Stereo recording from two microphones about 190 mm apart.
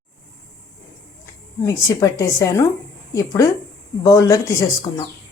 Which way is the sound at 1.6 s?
15° left (ahead or behind).